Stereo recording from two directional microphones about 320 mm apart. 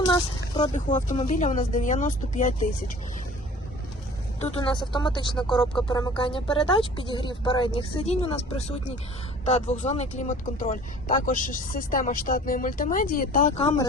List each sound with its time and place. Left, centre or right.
0.0 s speech: centre
4.4 s speech: centre